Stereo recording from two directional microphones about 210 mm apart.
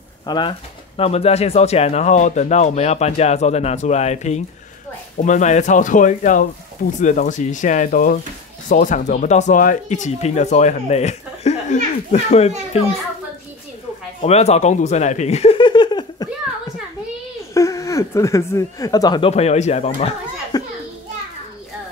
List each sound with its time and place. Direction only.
0.3 s speech: 25° left (ahead or behind)
14.2 s speech: 30° left (ahead or behind)
17.6 s speech: 15° left (ahead or behind); by 20.2 s 30° left (ahead or behind)
20.5 s children playing: 20° left (ahead or behind)